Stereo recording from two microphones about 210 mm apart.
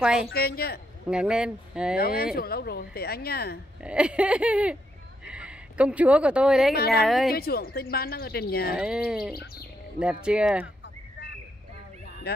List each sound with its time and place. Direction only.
0.0 s speech: 5° right (ahead or behind)
0.3 s speech: 45° left (ahead or behind)
1.1 s speech: 5° right (ahead or behind)
2.0 s speech: 45° left (ahead or behind)
3.8 s speech: 5° right (ahead or behind)
5.2 s a sound: 5° right (ahead or behind)
7.1 s speech: centre (ahead or behind)
7.3 s speech: 45° left (ahead or behind)
8.7 s speech: 5° right (ahead or behind)